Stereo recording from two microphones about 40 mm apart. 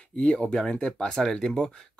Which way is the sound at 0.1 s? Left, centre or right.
Left.